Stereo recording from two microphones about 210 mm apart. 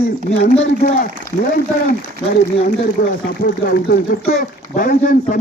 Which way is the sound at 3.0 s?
40° left (ahead or behind).